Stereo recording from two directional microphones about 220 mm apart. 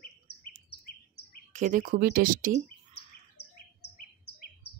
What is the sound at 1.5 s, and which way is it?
Speech, 35° right (ahead or behind).